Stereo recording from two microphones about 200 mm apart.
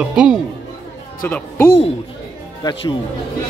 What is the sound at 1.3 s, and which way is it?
Speech, 10° left (ahead or behind).